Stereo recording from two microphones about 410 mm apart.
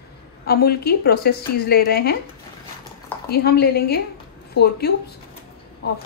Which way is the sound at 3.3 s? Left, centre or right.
Left.